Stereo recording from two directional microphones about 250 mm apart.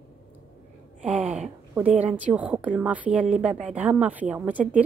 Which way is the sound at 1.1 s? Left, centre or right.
Right.